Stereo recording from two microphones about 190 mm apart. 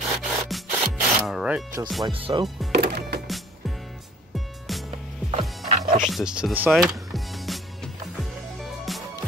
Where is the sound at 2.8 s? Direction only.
60° right (ahead or behind).